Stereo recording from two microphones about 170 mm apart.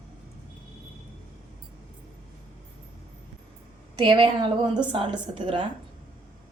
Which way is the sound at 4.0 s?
30° right (ahead or behind).